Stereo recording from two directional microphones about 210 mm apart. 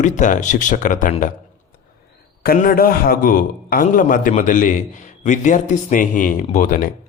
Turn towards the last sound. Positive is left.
turn(degrees=40)  # may be behind; listen again after turning